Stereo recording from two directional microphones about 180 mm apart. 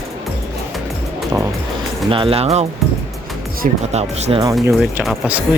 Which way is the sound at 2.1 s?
30° right (ahead or behind).